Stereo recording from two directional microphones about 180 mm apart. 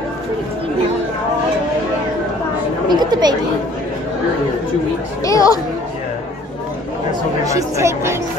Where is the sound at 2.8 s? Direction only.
25° right (ahead or behind).